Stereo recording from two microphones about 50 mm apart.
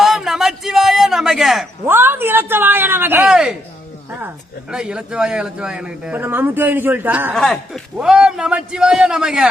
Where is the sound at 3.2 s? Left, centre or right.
Centre.